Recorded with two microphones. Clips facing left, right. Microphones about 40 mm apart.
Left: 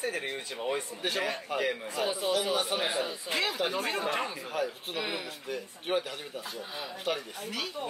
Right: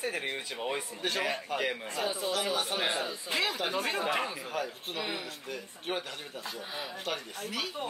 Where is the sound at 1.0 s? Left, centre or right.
Centre.